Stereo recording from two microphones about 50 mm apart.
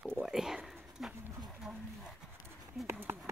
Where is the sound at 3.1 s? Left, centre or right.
Right.